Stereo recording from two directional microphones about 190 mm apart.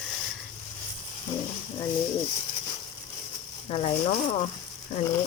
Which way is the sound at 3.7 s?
30° left (ahead or behind).